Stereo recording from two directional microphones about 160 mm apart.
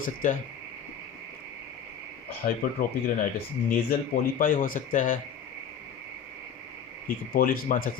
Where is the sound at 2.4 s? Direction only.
70° left (ahead or behind).